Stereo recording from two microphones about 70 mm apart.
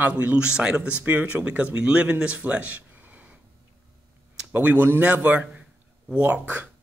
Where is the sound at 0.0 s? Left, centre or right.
Right.